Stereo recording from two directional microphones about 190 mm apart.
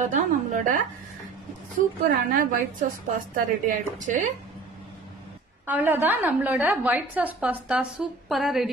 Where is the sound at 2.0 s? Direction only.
45° right (ahead or behind).